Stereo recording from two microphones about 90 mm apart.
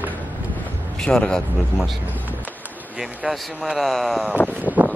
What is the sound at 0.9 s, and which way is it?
Speech, 10° left (ahead or behind).